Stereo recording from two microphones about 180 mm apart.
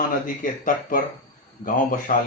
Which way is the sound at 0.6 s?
50° left (ahead or behind).